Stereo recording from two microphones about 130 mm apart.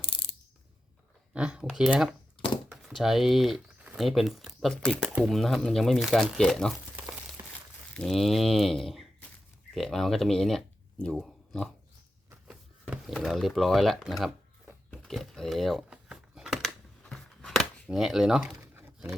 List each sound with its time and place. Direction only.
1.3 s speech: 5° right (ahead or behind)
6.9 s crumpling: 10° right (ahead or behind)
7.9 s speech: centre (ahead or behind)
13.1 s speech: centre (ahead or behind)
14.8 s a sound: 5° left (ahead or behind)